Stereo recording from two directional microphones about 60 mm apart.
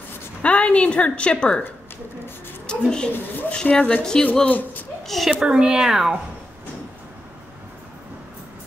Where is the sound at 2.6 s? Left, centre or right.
Centre.